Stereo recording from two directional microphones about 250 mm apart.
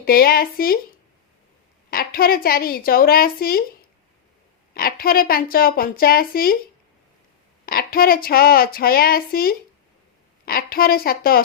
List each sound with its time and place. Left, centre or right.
0.0 s a woman's voice: left
1.9 s a woman's voice: left
7.6 s a woman's voice: left